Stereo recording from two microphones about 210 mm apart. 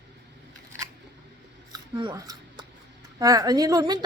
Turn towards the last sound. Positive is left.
turn(degrees=-20)  # may be behind; listen again after turning